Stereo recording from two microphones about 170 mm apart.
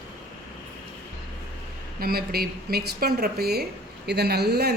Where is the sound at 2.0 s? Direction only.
65° right (ahead or behind).